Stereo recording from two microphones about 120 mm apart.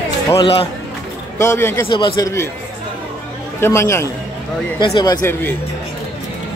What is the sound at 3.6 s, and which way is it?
Speech, 20° left (ahead or behind).